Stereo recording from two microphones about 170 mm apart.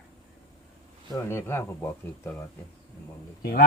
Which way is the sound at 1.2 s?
15° left (ahead or behind).